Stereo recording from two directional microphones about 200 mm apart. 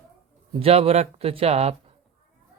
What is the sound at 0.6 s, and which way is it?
Speech, 30° right (ahead or behind).